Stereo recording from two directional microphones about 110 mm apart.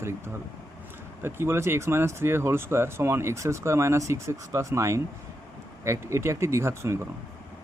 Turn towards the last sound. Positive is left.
turn(degrees=-25)  # may be behind; listen again after turning